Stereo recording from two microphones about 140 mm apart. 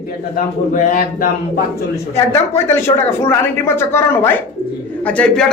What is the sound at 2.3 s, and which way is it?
Speech, 20° left (ahead or behind).